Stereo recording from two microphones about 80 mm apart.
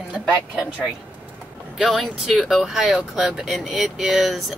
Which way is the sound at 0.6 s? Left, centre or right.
Centre.